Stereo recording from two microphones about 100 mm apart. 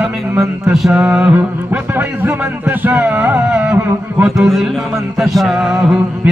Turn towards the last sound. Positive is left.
turn(degrees=-5)  # may be behind; listen again after turning